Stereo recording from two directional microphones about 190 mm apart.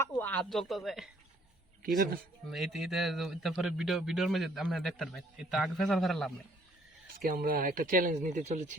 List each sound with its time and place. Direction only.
0.0 s speech: 10° left (ahead or behind)
2.5 s speech: centre (ahead or behind)
7.1 s speech: 50° right (ahead or behind)